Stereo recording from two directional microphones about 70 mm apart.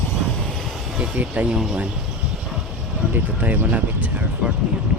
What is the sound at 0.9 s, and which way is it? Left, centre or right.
Speech, centre.